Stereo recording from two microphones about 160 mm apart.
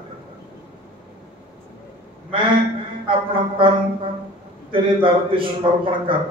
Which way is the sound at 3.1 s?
30° right (ahead or behind).